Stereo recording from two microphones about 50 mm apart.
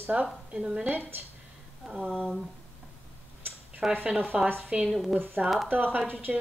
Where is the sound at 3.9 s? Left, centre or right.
Right.